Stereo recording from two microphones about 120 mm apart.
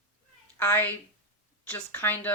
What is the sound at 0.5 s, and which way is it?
A woman's voice, 15° left (ahead or behind).